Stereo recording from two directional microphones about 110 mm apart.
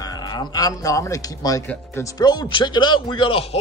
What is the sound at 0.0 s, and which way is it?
Speech, 40° left (ahead or behind).